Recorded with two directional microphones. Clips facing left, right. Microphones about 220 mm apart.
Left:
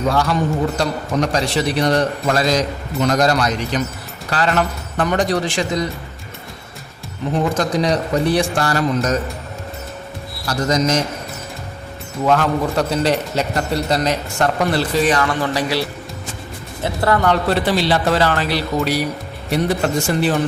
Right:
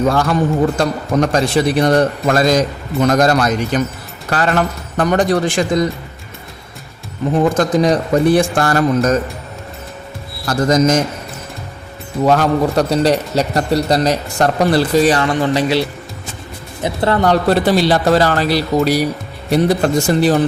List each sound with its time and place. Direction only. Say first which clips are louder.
0.1 s a man's voice: right 3 dB; 50° right (ahead or behind)
7.8 s a man's voice: right 5 dB; 50° right (ahead or behind)
10.4 s a man's voice: right 5 dB; 50° right (ahead or behind)
12.2 s speech: right 4 dB; 40° right (ahead or behind)
15.3 s speech: right 5 dB; 25° right (ahead or behind)
16.8 s speech: right 2 dB; 20° right (ahead or behind)
17.2 s speech: right 4 dB; 40° right (ahead or behind)